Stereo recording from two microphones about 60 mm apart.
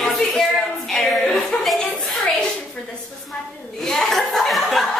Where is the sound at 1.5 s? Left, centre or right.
Left.